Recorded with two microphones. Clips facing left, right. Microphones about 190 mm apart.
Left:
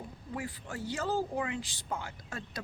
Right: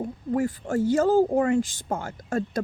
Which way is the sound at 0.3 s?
45° right (ahead or behind).